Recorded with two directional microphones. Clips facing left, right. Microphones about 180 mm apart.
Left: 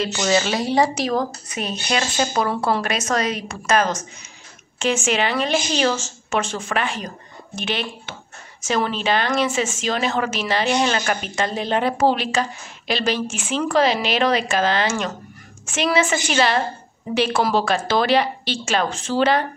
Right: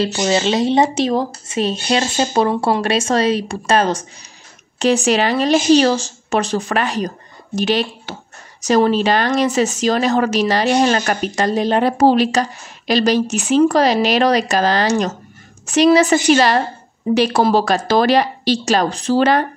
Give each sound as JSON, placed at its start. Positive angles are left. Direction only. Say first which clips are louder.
{"t": 0.0, "sound": "speech", "louder": "right 3 dB", "side_deg": -25}